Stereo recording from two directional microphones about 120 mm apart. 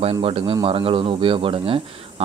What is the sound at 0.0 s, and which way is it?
Speech, 50° right (ahead or behind).